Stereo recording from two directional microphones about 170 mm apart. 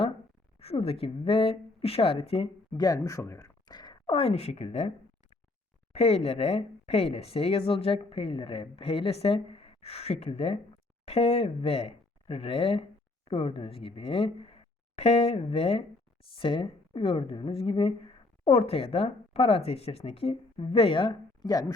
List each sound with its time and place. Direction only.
0.6 s speech: 35° left (ahead or behind)
5.9 s speech: 35° left (ahead or behind)